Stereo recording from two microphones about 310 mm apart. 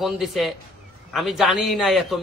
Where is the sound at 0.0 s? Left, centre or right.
Centre.